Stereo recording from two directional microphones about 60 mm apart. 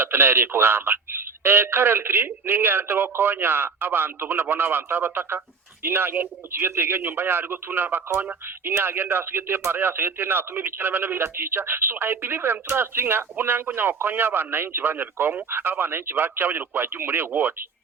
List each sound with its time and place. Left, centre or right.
0.0 s speech: right